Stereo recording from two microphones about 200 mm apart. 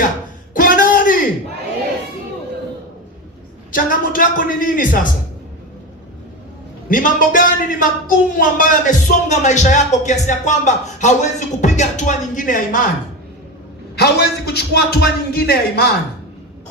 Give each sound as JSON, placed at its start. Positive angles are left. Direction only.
{"t": 0.5, "sound": "a sound", "side_deg": 45}
{"t": 3.7, "sound": "a man's voice", "side_deg": 45}
{"t": 6.8, "sound": "a man's voice", "side_deg": 45}
{"t": 13.9, "sound": "a man's voice", "side_deg": 55}